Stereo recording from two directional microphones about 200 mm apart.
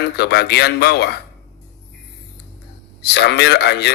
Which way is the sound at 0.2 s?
55° left (ahead or behind).